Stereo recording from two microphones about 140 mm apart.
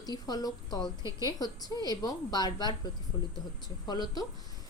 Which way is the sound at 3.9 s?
30° left (ahead or behind).